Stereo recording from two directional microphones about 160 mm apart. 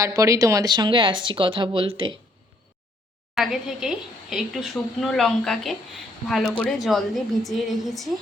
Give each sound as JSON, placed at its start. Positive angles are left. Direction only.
{"t": 0.0, "sound": "speech", "side_deg": -20}
{"t": 3.3, "sound": "a woman's voice", "side_deg": 0}